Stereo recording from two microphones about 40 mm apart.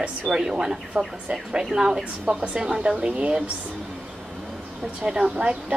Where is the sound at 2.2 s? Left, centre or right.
Right.